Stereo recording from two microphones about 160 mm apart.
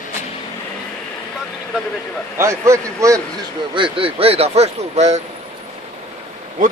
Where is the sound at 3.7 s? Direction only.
30° right (ahead or behind).